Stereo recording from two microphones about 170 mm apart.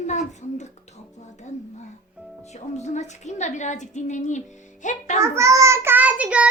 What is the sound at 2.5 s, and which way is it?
A woman's voice, 40° left (ahead or behind).